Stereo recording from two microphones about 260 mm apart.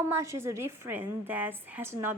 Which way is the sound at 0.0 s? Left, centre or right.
Centre.